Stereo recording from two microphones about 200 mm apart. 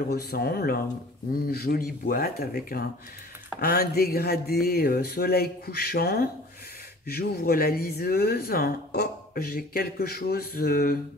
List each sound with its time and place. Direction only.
0.1 s speech: 50° left (ahead or behind)